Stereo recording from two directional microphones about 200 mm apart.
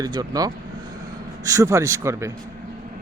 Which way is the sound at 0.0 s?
20° right (ahead or behind).